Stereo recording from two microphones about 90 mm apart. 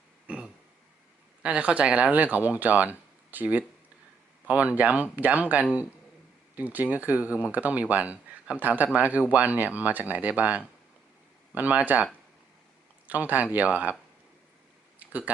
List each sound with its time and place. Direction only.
0.3 s burping: 10° right (ahead or behind)
1.4 s speech: 15° right (ahead or behind)
13.1 s speech: 20° right (ahead or behind)
14.9 s a sound: 20° right (ahead or behind)